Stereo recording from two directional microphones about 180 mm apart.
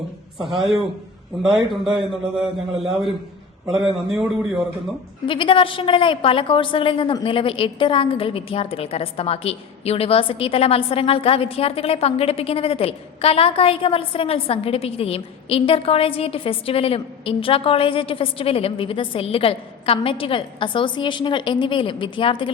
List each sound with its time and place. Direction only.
1.7 s a man's voice: centre (ahead or behind)
4.1 s a man's voice: centre (ahead or behind)
5.2 s a woman's voice: 30° left (ahead or behind)